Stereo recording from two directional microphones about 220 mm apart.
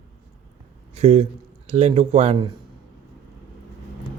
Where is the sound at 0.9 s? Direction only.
30° right (ahead or behind).